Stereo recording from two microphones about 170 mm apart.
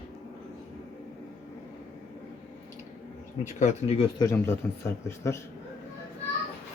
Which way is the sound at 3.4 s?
40° left (ahead or behind).